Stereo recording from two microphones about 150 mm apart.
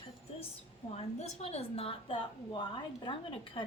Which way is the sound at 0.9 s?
45° left (ahead or behind).